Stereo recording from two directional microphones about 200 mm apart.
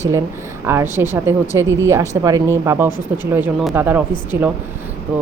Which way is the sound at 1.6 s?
70° right (ahead or behind).